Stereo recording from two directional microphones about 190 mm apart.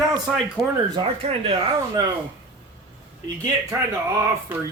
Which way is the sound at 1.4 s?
30° right (ahead or behind).